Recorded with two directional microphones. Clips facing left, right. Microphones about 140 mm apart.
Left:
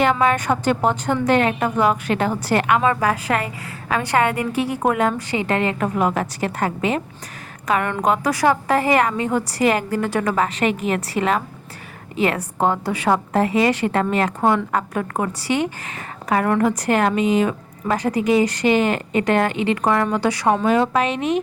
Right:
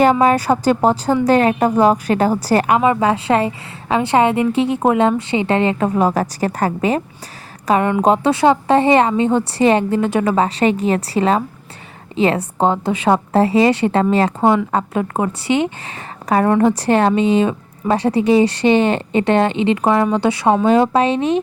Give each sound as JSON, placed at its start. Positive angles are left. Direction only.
{"t": 0.0, "sound": "a woman's voice", "side_deg": -35}
{"t": 2.8, "sound": "a woman's voice", "side_deg": -20}
{"t": 7.7, "sound": "a woman's voice", "side_deg": -20}